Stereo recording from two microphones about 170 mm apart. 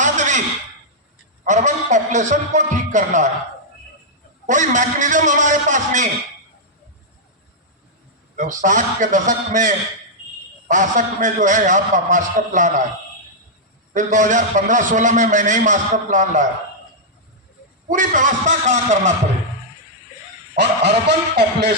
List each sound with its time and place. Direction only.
0.0 s a sound: 45° right (ahead or behind)
1.5 s a man's voice: 45° right (ahead or behind)
4.4 s a man's voice: 45° right (ahead or behind)
8.4 s a man's voice: 50° right (ahead or behind)
13.9 s a man's voice: 45° right (ahead or behind)
17.8 s a man's voice: 50° right (ahead or behind)
20.6 s speech: 80° right